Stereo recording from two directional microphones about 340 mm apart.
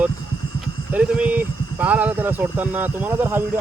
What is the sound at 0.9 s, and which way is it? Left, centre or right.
Speech, centre.